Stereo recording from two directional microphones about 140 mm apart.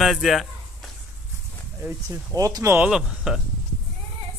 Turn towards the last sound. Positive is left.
turn(degrees=-5)  # may be behind; listen again after turning